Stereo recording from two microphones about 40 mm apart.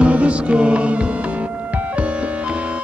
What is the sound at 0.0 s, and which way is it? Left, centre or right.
Music, right.